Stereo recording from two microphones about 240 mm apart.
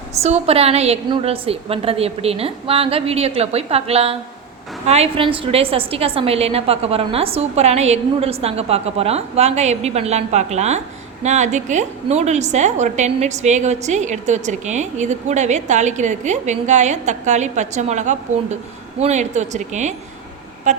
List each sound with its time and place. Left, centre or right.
0.2 s a woman's voice: right